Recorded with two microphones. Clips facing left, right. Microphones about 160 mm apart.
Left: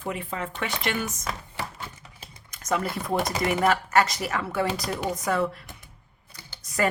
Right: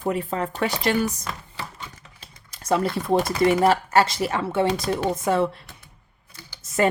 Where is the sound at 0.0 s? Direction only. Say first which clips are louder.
Right 6 dB; 40° right (ahead or behind).